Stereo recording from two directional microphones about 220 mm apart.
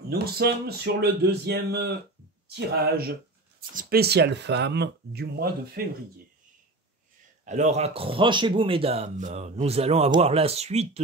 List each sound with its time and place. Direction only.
0.1 s speech: 45° right (ahead or behind)
7.4 s speech: 30° right (ahead or behind)